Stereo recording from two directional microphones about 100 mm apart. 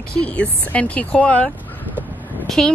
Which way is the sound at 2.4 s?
5° left (ahead or behind).